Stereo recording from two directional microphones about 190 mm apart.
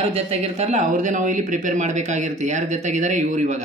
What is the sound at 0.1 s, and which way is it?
Speech, 35° right (ahead or behind).